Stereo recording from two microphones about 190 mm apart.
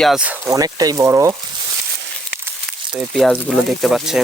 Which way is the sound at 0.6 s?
20° right (ahead or behind).